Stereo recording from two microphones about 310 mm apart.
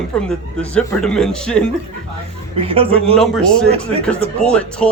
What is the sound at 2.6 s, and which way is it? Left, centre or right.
Speech, centre.